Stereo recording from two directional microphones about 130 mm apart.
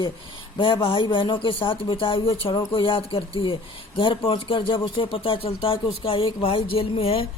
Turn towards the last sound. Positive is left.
turn(degrees=45)  # may be behind; listen again after turning